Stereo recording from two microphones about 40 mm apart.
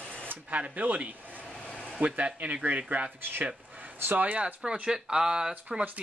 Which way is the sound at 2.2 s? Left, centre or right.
Right.